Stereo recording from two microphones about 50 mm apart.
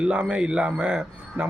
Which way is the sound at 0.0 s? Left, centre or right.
Right.